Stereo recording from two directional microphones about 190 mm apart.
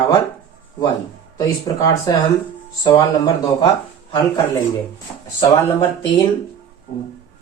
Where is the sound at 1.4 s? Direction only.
20° left (ahead or behind).